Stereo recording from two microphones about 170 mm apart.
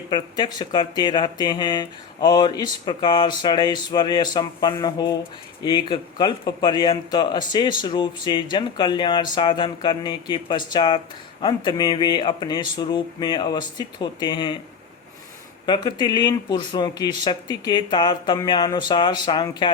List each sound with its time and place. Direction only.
0.1 s speech: 25° left (ahead or behind)
15.6 s speech: 25° left (ahead or behind)